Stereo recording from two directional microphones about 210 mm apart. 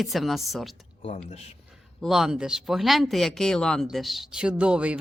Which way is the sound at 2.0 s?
Centre (ahead or behind).